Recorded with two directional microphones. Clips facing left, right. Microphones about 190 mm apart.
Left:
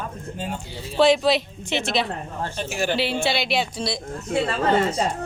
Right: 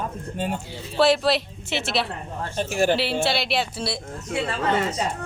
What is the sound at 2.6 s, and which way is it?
Speech, 50° right (ahead or behind).